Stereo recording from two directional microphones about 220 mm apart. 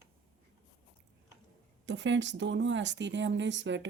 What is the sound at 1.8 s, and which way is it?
Speech, 55° right (ahead or behind).